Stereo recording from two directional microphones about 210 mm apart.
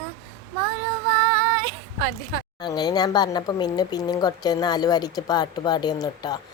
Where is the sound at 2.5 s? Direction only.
20° left (ahead or behind).